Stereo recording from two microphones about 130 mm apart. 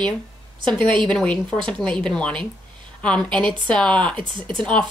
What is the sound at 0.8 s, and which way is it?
Speech, 40° right (ahead or behind).